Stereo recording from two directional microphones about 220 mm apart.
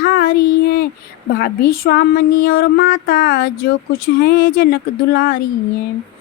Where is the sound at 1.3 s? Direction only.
40° left (ahead or behind).